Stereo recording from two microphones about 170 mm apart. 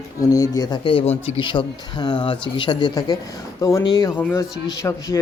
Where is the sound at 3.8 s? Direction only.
25° left (ahead or behind).